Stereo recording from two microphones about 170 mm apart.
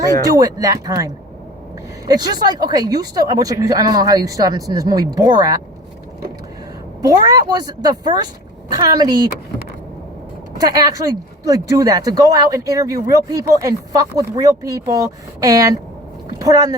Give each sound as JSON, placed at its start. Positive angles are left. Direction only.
{"t": 0.0, "sound": "speech", "side_deg": -20}
{"t": 7.0, "sound": "speech", "side_deg": -20}
{"t": 10.7, "sound": "speech", "side_deg": -25}